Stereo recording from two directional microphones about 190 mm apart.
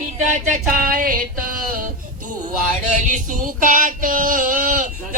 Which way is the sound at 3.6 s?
45° right (ahead or behind).